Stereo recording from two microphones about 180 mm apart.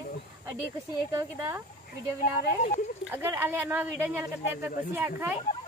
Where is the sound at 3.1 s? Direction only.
10° right (ahead or behind).